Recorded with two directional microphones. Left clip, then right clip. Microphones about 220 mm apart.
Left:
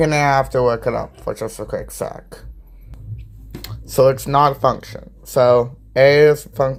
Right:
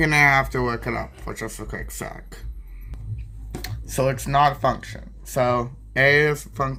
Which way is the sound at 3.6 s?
15° left (ahead or behind).